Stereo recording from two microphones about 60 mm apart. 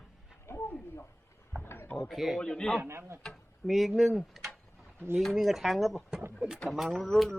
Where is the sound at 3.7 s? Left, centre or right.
Centre.